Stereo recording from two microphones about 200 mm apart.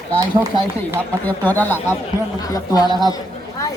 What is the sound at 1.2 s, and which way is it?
Speech, 10° left (ahead or behind).